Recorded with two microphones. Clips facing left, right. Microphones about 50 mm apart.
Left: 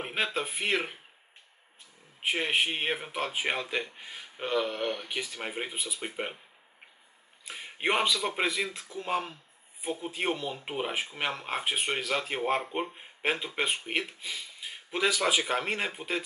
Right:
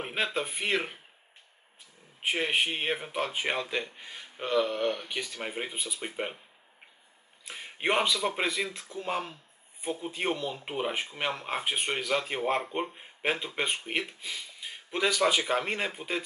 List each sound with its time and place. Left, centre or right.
0.0 s speech: centre
2.2 s speech: centre
7.4 s speech: centre